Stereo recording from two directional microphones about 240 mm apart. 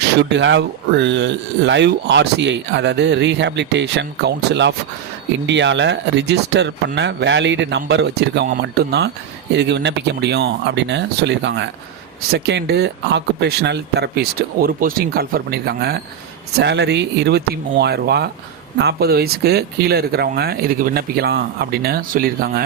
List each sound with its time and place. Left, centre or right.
0.2 s speech: right